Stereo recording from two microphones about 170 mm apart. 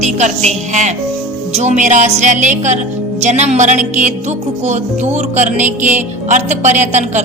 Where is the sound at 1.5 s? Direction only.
45° right (ahead or behind).